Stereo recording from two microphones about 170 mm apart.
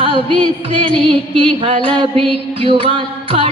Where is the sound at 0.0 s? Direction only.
30° right (ahead or behind).